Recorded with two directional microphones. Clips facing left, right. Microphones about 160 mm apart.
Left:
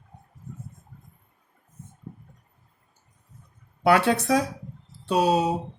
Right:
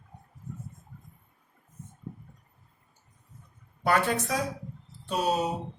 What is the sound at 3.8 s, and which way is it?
Speech, 75° left (ahead or behind).